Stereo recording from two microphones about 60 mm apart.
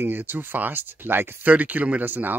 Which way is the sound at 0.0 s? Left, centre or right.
Right.